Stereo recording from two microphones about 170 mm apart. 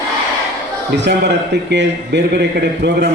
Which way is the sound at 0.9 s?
90° right.